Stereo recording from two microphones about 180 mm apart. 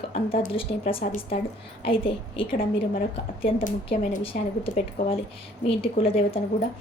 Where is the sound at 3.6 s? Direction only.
45° left (ahead or behind).